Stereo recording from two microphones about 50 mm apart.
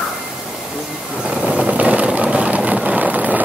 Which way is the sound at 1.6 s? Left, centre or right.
Right.